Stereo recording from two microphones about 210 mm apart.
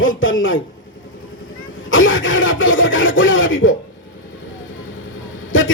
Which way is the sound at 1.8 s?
65° left (ahead or behind).